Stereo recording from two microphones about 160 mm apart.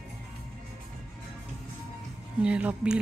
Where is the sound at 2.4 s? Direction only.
10° right (ahead or behind).